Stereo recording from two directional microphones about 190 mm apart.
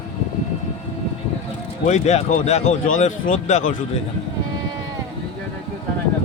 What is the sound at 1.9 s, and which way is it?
Speech, 35° left (ahead or behind).